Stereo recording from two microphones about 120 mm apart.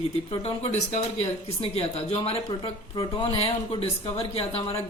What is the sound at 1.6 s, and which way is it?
Speech, 55° left (ahead or behind).